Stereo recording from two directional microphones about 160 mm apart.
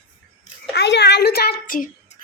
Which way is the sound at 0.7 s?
90° left.